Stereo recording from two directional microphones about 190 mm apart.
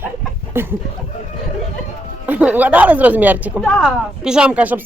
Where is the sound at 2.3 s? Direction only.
10° right (ahead or behind).